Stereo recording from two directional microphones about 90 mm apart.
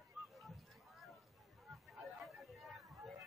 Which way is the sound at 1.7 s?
Centre (ahead or behind).